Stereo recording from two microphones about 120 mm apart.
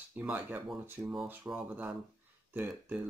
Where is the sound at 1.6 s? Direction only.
15° right (ahead or behind).